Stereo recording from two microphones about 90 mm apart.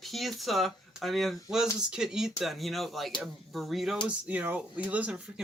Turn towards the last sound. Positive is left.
turn(degrees=-15)  # may be behind; listen again after turning